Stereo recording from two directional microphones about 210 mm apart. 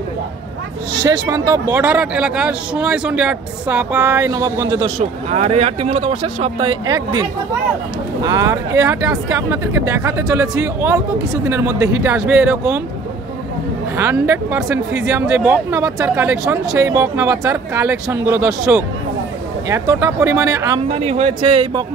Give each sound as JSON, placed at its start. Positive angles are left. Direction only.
{"t": 0.9, "sound": "speech", "side_deg": -20}
{"t": 4.9, "sound": "speech", "side_deg": -30}
{"t": 13.9, "sound": "speech", "side_deg": -10}
{"t": 19.7, "sound": "speech", "side_deg": -15}
{"t": 20.9, "sound": "a man's voice", "side_deg": -30}